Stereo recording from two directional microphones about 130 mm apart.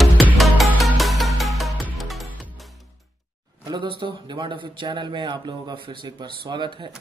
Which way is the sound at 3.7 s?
40° right (ahead or behind).